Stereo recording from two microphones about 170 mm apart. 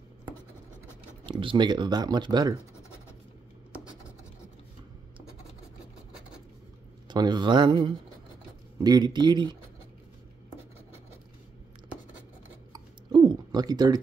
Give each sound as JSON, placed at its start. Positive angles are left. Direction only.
{"t": 1.2, "sound": "speech", "side_deg": -30}
{"t": 7.1, "sound": "speech", "side_deg": -25}
{"t": 12.7, "sound": "a sound", "side_deg": -25}